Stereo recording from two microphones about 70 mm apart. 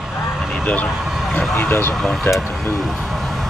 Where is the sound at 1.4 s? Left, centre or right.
Left.